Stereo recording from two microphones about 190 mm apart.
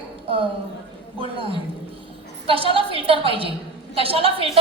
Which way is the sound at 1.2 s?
30° right (ahead or behind).